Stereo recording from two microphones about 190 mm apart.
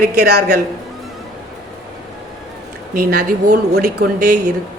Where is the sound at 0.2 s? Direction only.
60° right (ahead or behind).